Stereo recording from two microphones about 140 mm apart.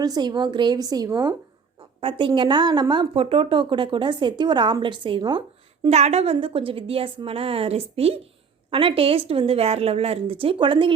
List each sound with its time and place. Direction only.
0.0 s a woman's voice: 30° right (ahead or behind)
5.8 s a woman's voice: 50° right (ahead or behind)